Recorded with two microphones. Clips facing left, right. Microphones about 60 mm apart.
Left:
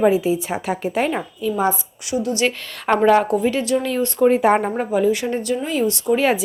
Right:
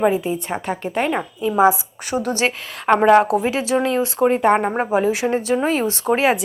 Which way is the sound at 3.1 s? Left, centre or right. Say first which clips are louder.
Right 2 dB; right.